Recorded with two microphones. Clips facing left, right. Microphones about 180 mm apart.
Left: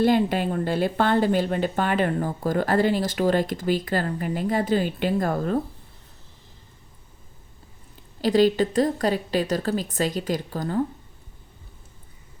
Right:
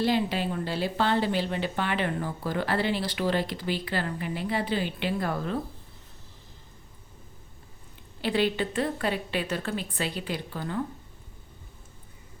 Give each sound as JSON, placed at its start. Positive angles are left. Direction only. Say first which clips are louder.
{"t": 0.0, "sound": "a woman's voice", "louder": "left 6 dB", "side_deg": 50}
{"t": 8.2, "sound": "speech", "louder": "left 7 dB", "side_deg": 40}